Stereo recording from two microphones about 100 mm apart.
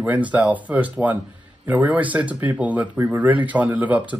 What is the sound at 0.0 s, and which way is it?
Speech, 15° right (ahead or behind).